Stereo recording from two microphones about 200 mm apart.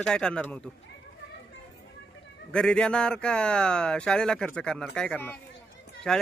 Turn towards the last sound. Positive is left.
turn(degrees=5)  # may be behind; listen again after turning